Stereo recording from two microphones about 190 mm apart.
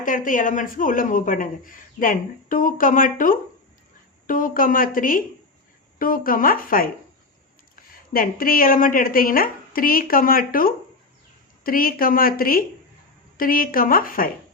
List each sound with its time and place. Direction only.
0.0 s speech: 45° left (ahead or behind)
8.1 s speech: 50° left (ahead or behind)